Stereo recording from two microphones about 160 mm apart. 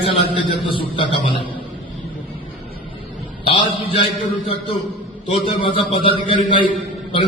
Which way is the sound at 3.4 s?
35° left (ahead or behind).